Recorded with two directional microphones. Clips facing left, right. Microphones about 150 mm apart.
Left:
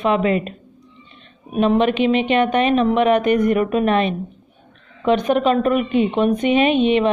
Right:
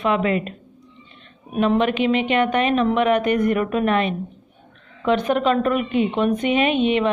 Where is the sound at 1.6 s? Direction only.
20° left (ahead or behind).